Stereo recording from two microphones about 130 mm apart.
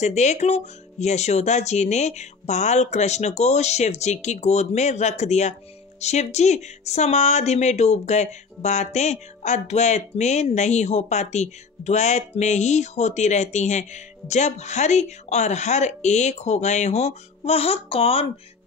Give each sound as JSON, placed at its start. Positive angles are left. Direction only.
{"t": 0.0, "sound": "speech", "side_deg": 60}